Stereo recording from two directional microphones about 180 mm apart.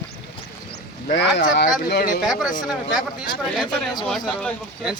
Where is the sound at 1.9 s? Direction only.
60° left (ahead or behind).